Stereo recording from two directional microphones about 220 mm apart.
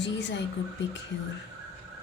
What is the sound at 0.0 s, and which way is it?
Speech, 55° left (ahead or behind).